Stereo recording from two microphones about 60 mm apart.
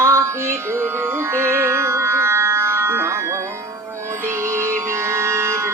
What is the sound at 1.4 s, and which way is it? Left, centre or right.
Music, right.